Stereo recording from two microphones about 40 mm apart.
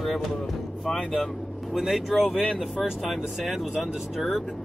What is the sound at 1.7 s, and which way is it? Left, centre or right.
Speech, centre.